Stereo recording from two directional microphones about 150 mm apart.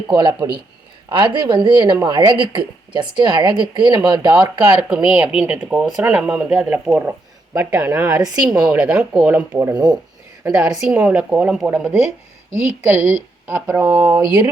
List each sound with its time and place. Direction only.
0.1 s a woman's voice: 30° right (ahead or behind)
4.4 s speech: 5° right (ahead or behind)
8.7 s speech: 5° right (ahead or behind)
9.7 s speech: 30° right (ahead or behind)
10.5 s speech: 5° right (ahead or behind)